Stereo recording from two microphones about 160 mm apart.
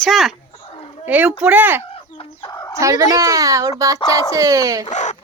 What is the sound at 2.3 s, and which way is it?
Speech, 25° left (ahead or behind).